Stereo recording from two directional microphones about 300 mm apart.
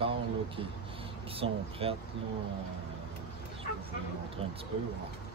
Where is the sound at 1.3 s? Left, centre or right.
Centre.